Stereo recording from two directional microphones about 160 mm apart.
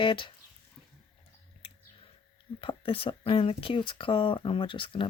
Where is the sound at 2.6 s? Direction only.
35° left (ahead or behind).